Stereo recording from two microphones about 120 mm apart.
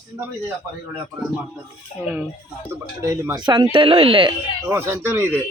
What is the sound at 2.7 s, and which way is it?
Speech, 25° right (ahead or behind).